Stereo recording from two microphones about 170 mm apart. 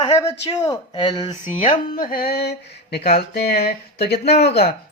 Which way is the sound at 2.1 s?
65° left (ahead or behind).